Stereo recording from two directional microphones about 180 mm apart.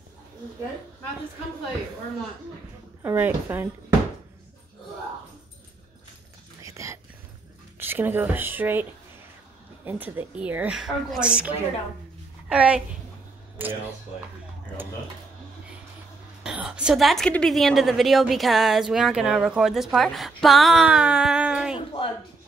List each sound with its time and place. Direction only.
3.0 s a woman's voice: 15° right (ahead or behind)
6.6 s a sound: 15° right (ahead or behind)
7.8 s a woman's voice: 10° right (ahead or behind)
9.8 s a woman's voice: 10° right (ahead or behind)
16.4 s a woman's voice: 5° right (ahead or behind)
21.7 s a woman's voice: 30° left (ahead or behind)